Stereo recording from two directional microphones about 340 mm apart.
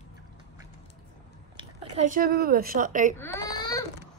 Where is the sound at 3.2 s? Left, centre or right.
Centre.